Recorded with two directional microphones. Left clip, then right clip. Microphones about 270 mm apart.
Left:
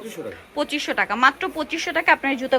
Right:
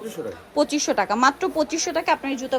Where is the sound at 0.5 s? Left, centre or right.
Centre.